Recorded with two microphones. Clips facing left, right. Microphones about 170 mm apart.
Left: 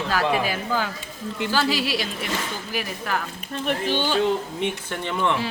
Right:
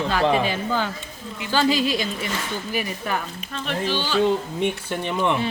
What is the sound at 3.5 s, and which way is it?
Speech, 50° left (ahead or behind).